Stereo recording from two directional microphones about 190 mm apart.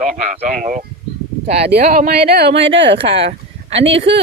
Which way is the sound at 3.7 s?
75° right (ahead or behind).